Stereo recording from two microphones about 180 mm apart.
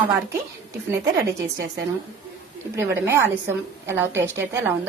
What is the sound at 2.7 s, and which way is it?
A woman's voice, 15° right (ahead or behind).